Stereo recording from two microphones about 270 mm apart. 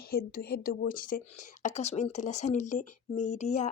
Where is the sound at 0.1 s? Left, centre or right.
Left.